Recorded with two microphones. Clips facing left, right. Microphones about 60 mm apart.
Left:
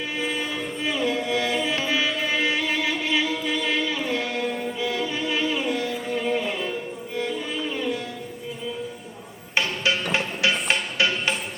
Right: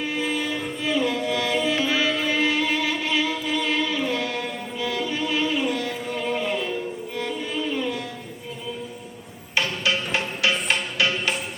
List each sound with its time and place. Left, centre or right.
0.2 s music: left
4.8 s chant: left
9.6 s music: left